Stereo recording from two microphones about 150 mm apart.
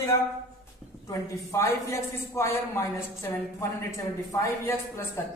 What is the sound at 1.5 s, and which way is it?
A woman's voice, 15° left (ahead or behind).